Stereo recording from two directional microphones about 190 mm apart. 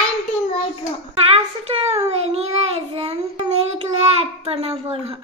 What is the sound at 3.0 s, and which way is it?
Child singing, 30° right (ahead or behind).